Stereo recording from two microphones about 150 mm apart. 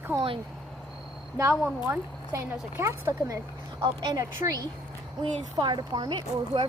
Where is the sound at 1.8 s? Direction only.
20° right (ahead or behind).